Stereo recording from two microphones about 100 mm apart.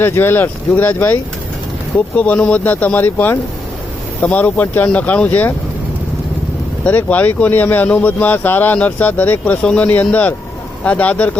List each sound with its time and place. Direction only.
0.0 s speech: 20° left (ahead or behind)
6.8 s speech: 15° left (ahead or behind)